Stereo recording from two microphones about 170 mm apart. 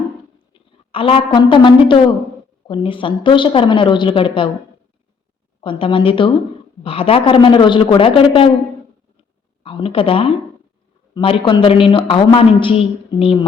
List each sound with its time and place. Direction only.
0.5 s a woman's voice: 30° left (ahead or behind)
5.6 s a woman's voice: 30° left (ahead or behind)
9.6 s a woman's voice: 30° left (ahead or behind)